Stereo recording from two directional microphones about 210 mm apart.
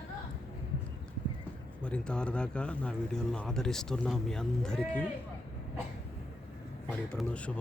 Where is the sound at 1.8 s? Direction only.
5° left (ahead or behind).